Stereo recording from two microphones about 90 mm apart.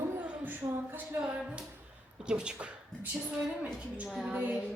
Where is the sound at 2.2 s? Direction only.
10° right (ahead or behind).